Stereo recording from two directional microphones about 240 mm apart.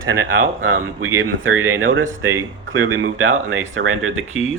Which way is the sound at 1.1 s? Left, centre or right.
Right.